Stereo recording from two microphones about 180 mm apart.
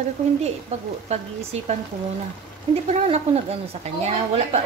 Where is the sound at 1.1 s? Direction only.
35° right (ahead or behind).